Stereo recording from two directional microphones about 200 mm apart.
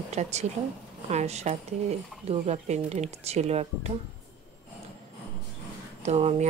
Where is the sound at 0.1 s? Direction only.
35° right (ahead or behind).